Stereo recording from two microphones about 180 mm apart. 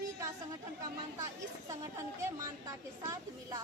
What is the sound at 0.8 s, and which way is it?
Speech, 20° right (ahead or behind).